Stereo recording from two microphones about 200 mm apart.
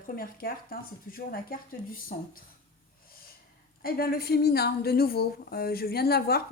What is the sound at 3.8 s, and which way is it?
Speech, 50° left (ahead or behind).